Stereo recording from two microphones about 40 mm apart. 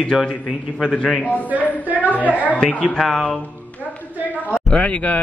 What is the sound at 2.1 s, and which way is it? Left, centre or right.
Speech, left.